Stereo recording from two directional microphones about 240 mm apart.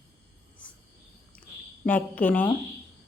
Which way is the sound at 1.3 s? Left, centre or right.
Centre.